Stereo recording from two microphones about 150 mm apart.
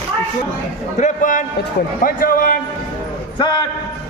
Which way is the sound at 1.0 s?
60° left (ahead or behind).